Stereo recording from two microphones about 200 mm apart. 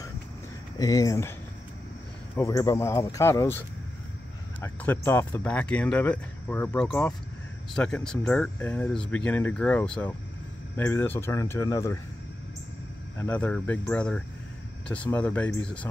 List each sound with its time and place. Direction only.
0.7 s speech: 20° left (ahead or behind)
2.3 s speech: 15° left (ahead or behind)
13.2 s speech: 5° left (ahead or behind)